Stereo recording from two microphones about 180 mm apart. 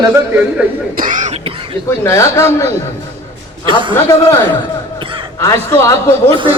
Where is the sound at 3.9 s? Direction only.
15° left (ahead or behind).